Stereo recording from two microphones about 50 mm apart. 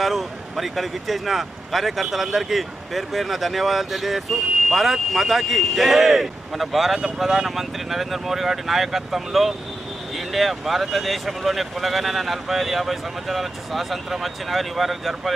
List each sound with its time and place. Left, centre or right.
0.0 s speech: centre